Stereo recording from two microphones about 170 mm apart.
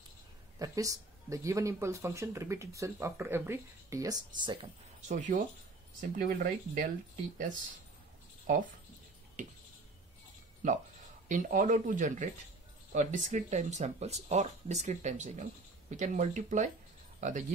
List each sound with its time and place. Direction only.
0.6 s speech: 20° right (ahead or behind)
5.0 s speech: 45° right (ahead or behind)
5.9 s speech: 55° right (ahead or behind)
8.5 s speech: 50° right (ahead or behind)
11.2 s speech: 50° right (ahead or behind)